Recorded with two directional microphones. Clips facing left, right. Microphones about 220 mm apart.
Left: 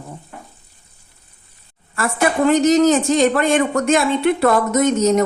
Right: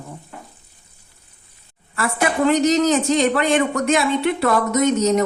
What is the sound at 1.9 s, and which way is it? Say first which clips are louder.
Speech: left 2 dB; 45° left (ahead or behind).